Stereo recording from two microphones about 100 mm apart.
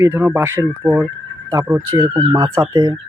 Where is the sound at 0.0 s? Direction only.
20° right (ahead or behind).